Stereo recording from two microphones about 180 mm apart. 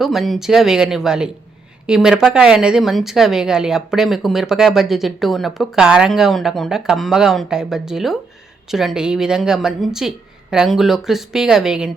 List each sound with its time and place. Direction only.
0.0 s a woman's voice: centre (ahead or behind)